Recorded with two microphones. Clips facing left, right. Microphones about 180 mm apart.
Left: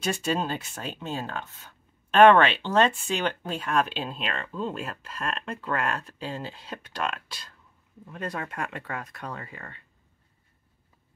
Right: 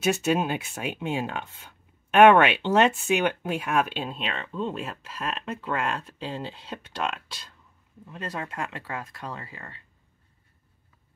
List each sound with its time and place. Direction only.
0.0 s speech: 5° right (ahead or behind)